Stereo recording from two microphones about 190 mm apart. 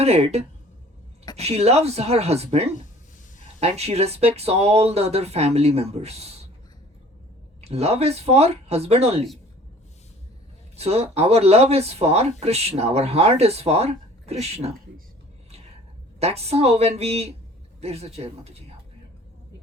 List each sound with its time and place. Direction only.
0.0 s speech: 35° right (ahead or behind)
7.6 s speech: 35° right (ahead or behind)
10.8 s speech: 35° right (ahead or behind)
16.2 s speech: 35° right (ahead or behind)